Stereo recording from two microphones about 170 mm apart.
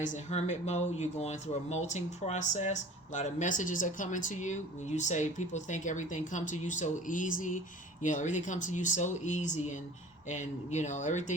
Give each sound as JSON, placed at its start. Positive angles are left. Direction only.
{"t": 0.0, "sound": "speech", "side_deg": 45}